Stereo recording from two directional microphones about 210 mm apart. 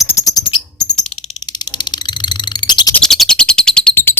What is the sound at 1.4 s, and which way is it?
Frog, 20° left (ahead or behind).